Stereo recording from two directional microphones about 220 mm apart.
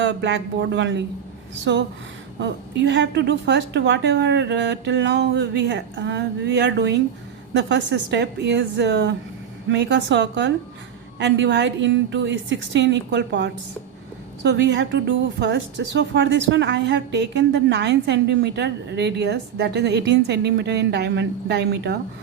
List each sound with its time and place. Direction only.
0.0 s a woman's voice: 55° right (ahead or behind)